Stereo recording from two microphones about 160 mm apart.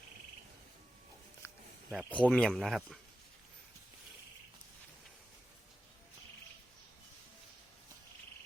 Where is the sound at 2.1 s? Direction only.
10° left (ahead or behind).